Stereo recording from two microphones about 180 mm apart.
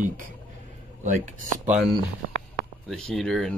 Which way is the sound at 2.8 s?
5° left (ahead or behind).